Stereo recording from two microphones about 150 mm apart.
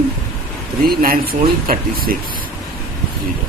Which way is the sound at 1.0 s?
75° right (ahead or behind).